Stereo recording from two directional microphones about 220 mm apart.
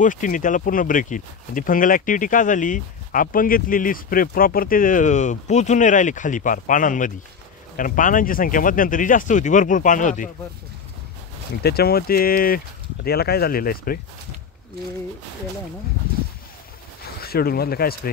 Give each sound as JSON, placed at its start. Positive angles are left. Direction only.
{"t": 0.0, "sound": "speech", "side_deg": 35}
{"t": 11.6, "sound": "speech", "side_deg": 45}
{"t": 17.2, "sound": "speech", "side_deg": 45}